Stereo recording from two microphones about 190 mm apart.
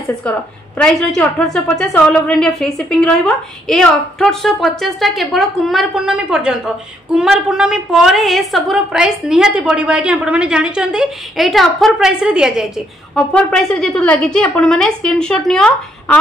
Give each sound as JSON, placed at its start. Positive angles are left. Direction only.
{"t": 0.7, "sound": "a woman's voice", "side_deg": 5}